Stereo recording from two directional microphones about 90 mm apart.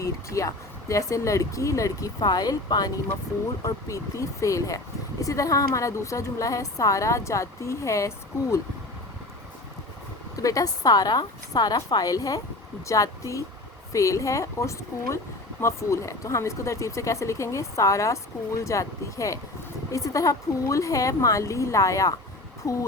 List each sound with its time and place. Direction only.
0.0 s a woman's voice: 35° left (ahead or behind)
10.4 s a woman's voice: 40° left (ahead or behind)